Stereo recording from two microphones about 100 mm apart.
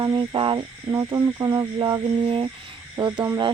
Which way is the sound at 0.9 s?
35° right (ahead or behind).